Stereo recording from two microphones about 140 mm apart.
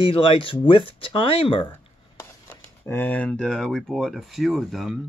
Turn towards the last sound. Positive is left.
turn(degrees=0)  # may be behind; listen again after turning